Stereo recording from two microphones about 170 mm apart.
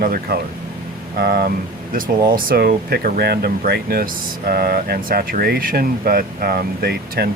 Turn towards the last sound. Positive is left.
turn(degrees=-65)  # may be behind; listen again after turning